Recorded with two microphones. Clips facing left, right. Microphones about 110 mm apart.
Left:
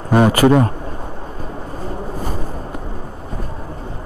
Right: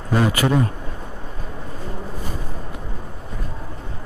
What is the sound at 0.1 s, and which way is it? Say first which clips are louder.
Speech: left 7 dB; 50° left (ahead or behind).